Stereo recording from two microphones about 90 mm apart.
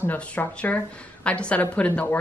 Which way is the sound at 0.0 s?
20° left (ahead or behind).